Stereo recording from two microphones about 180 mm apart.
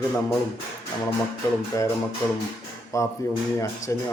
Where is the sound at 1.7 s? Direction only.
15° left (ahead or behind).